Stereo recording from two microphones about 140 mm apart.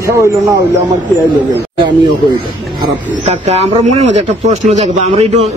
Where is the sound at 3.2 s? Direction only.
50° right (ahead or behind).